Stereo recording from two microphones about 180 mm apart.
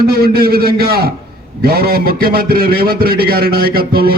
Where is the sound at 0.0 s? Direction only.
55° right (ahead or behind).